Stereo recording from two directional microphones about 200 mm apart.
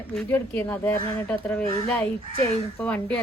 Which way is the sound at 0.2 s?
10° left (ahead or behind).